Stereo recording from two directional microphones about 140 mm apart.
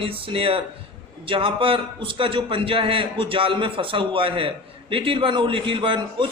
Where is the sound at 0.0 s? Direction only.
40° right (ahead or behind).